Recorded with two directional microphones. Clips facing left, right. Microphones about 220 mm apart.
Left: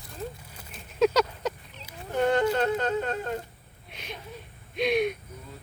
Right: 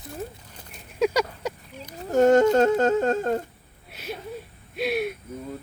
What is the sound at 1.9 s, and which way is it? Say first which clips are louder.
Speech: right 8 dB; 45° right (ahead or behind).